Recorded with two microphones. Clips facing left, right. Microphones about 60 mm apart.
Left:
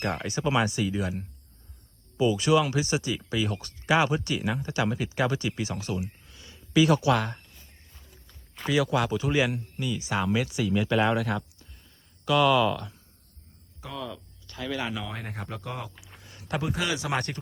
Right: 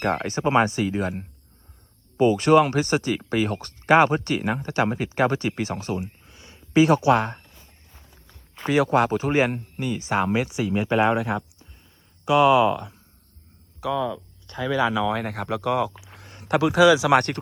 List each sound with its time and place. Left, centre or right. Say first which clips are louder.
0.0 s speech: right 5 dB; right
8.6 s speech: right 5 dB; right
13.8 s speech: right 14 dB; right
15.1 s speech: right 10 dB; right
16.2 s a sound: right 9 dB; right
16.6 s speech: right 13 dB; right